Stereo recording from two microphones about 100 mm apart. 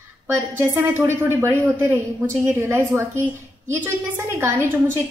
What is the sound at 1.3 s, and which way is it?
A woman's voice, 25° right (ahead or behind).